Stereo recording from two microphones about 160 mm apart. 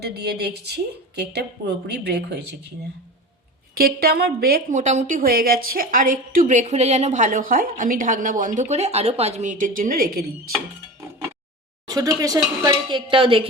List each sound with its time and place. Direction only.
0.0 s a woman's voice: 90° right
3.8 s a woman's voice: 70° right (ahead or behind)
4.7 s a woman's voice: 50° right (ahead or behind)
11.9 s speech: 25° right (ahead or behind)
13.1 s speech: 35° right (ahead or behind)